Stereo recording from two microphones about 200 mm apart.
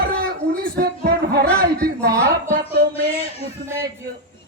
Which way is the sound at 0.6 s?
50° right (ahead or behind).